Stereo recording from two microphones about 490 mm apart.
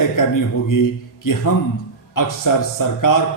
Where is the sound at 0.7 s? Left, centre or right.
Left.